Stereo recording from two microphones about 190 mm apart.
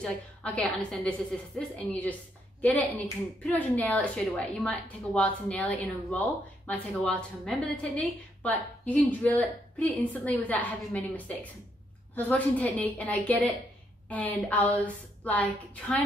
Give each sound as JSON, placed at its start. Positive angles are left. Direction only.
{"t": 0.0, "sound": "a woman's voice", "side_deg": 5}